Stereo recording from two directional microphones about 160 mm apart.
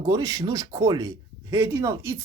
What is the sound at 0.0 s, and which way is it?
Speech, 20° right (ahead or behind).